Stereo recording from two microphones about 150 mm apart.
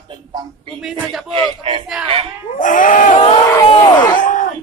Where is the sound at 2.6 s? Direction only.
60° left (ahead or behind).